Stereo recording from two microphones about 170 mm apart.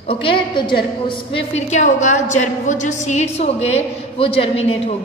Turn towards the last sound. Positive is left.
turn(degrees=35)  # may be behind; listen again after turning